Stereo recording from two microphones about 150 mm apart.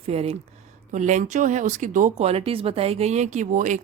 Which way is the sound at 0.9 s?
55° right (ahead or behind).